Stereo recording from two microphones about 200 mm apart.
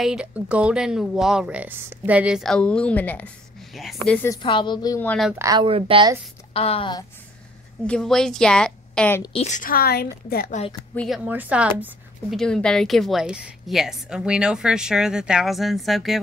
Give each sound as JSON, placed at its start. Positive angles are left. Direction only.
{"t": 0.0, "sound": "a woman's voice", "side_deg": -5}
{"t": 4.3, "sound": "a woman's voice", "side_deg": 25}
{"t": 5.4, "sound": "speech", "side_deg": -20}
{"t": 6.5, "sound": "a woman's voice", "side_deg": 30}
{"t": 7.8, "sound": "a woman's voice", "side_deg": 5}
{"t": 9.2, "sound": "a woman's voice", "side_deg": 30}
{"t": 10.9, "sound": "speech", "side_deg": 10}
{"t": 11.2, "sound": "speech", "side_deg": -10}
{"t": 12.4, "sound": "a woman's voice", "side_deg": 5}